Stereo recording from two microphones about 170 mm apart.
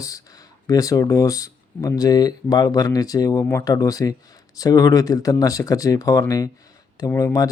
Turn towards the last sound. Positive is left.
turn(degrees=20)  # may be behind; listen again after turning